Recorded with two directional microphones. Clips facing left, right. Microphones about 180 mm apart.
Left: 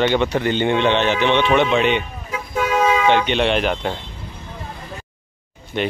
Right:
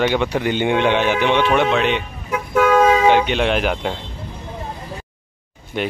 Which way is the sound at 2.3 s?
60° right (ahead or behind).